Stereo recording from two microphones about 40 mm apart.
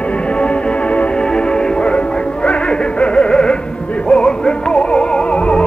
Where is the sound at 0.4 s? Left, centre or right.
Left.